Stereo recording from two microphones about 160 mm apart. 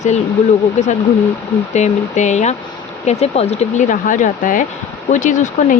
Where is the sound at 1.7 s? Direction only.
45° left (ahead or behind).